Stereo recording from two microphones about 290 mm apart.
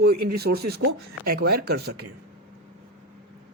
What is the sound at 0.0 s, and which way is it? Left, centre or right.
Speech, right.